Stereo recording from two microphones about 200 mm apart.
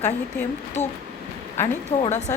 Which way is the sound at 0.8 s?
10° left (ahead or behind).